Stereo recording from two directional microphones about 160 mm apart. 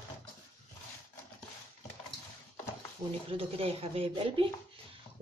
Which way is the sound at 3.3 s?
35° right (ahead or behind).